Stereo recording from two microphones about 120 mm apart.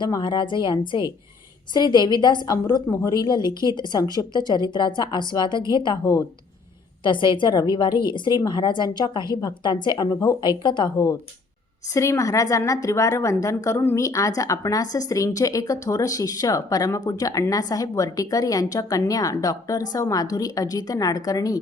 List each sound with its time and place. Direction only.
0.0 s speech: 40° left (ahead or behind)
6.0 s a woman's voice: 30° left (ahead or behind)
7.0 s a woman's voice: 40° left (ahead or behind)
10.6 s speech: 40° left (ahead or behind)
11.9 s a woman's voice: 25° left (ahead or behind)